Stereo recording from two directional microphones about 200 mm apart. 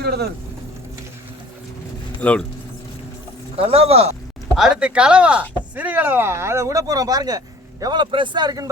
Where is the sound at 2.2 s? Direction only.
5° left (ahead or behind).